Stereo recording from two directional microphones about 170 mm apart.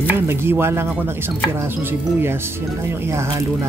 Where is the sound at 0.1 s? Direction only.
15° right (ahead or behind).